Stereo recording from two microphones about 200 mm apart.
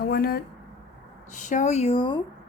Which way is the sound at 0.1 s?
50° left (ahead or behind).